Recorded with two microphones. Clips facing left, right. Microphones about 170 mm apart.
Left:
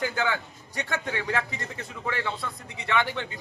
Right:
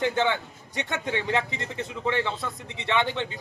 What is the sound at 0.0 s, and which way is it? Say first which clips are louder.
A man's voice: right 3 dB; 25° right (ahead or behind).